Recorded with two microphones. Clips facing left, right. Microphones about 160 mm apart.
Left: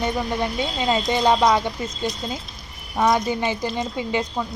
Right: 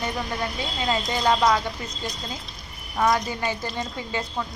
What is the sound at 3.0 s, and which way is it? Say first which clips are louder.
A woman's voice: left 3 dB; 20° left (ahead or behind).